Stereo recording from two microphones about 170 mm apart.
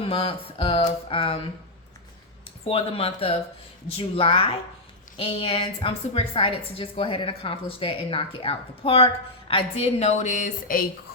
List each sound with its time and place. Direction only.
0.0 s a woman's voice: 30° left (ahead or behind)
2.6 s a woman's voice: 35° left (ahead or behind); by 10.8 s 50° left (ahead or behind)